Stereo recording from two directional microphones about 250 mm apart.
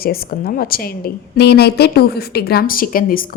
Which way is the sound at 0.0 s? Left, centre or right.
Left.